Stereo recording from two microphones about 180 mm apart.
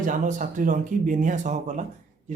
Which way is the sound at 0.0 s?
45° right (ahead or behind).